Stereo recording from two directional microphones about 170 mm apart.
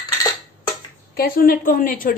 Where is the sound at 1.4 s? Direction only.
55° left (ahead or behind).